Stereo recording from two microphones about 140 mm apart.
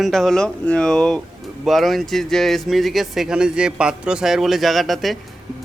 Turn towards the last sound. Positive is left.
turn(degrees=0)  # may be behind; listen again after turning